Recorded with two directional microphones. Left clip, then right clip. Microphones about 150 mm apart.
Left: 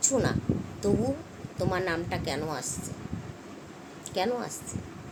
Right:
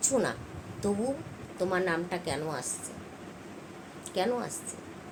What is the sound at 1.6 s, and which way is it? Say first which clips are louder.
A woman's voice: even; 10° left (ahead or behind).